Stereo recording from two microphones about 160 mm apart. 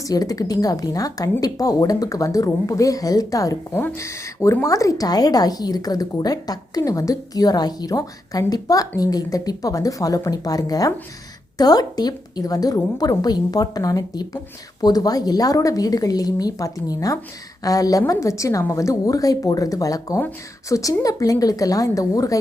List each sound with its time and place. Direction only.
0.1 s a woman's voice: 25° left (ahead or behind)